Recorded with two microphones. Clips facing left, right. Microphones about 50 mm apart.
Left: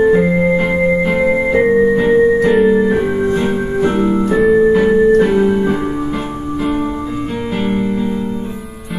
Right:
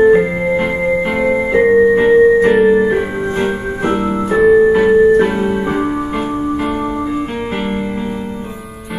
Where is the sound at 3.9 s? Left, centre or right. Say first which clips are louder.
Right 2 dB; centre.